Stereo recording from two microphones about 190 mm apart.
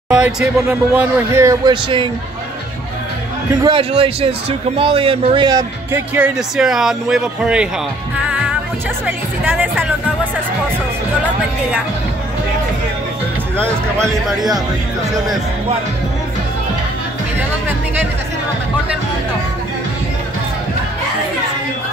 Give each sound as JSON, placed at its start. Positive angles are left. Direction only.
{"t": 0.1, "sound": "speech", "side_deg": -5}
{"t": 3.6, "sound": "a man's voice", "side_deg": -30}
{"t": 9.0, "sound": "speech", "side_deg": -10}
{"t": 13.9, "sound": "speech", "side_deg": 0}